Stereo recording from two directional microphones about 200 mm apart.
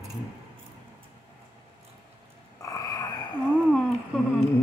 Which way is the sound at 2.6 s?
15° left (ahead or behind).